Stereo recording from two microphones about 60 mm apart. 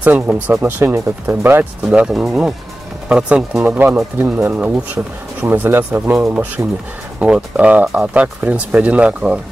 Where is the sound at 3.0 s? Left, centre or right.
Centre.